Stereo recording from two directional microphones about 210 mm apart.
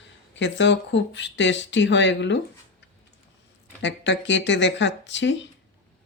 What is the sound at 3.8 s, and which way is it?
Speech, 60° left (ahead or behind).